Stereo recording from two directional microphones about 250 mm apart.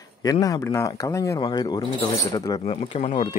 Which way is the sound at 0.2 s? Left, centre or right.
Centre.